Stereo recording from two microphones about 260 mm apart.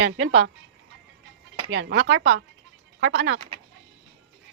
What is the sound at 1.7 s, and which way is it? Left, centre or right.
Speech, right.